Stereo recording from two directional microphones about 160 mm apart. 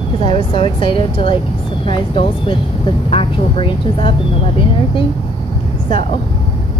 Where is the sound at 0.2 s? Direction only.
30° left (ahead or behind).